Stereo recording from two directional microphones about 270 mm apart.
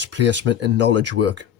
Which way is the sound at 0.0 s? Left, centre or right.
Right.